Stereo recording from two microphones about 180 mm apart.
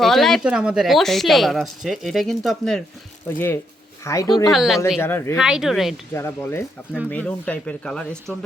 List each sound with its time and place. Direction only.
0.0 s speech: centre (ahead or behind)
3.2 s speech: 10° left (ahead or behind)
4.5 s speech: centre (ahead or behind)
4.9 s speech: 15° left (ahead or behind)
5.4 s speech: 5° right (ahead or behind)
6.1 s speech: 15° left (ahead or behind)